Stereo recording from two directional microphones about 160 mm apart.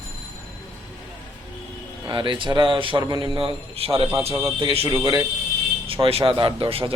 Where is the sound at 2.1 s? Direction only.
30° right (ahead or behind).